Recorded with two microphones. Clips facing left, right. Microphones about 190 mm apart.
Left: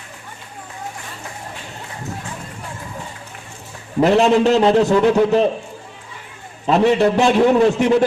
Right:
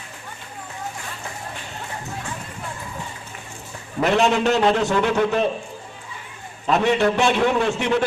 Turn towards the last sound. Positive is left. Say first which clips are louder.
# left 7 dB
turn(degrees=40)  # may be behind; listen again after turning